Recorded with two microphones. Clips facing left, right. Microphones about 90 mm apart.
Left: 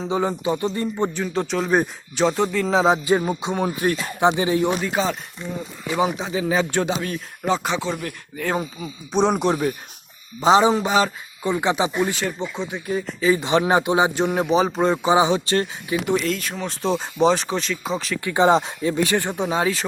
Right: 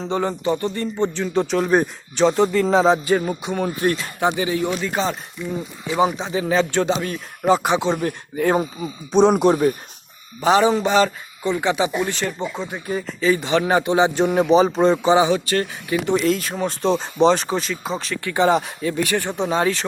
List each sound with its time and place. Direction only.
0.0 s speech: 5° left (ahead or behind)
3.0 s speech: 15° left (ahead or behind); by 4.8 s 35° left (ahead or behind)
4.8 s speech: 5° left (ahead or behind)
7.7 s speech: 20° right (ahead or behind)
9.1 s speech: centre (ahead or behind)
10.4 s a man's voice: 20° left (ahead or behind)
12.1 s speech: centre (ahead or behind)
13.3 s a man's voice: 20° left (ahead or behind)
14.2 s speech: centre (ahead or behind)
15.1 s speech: 20° left (ahead or behind)
16.1 s speech: 5° right (ahead or behind)
18.2 s a man's voice: 20° left (ahead or behind)